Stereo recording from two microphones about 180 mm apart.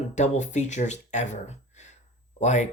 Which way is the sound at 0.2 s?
40° left (ahead or behind).